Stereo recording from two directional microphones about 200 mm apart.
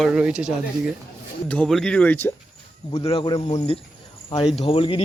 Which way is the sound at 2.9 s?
25° left (ahead or behind).